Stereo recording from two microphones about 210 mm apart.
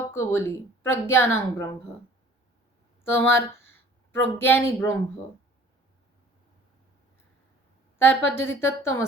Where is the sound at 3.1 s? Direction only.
10° left (ahead or behind).